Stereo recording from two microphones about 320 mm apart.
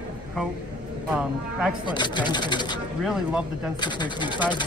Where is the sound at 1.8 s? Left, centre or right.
Centre.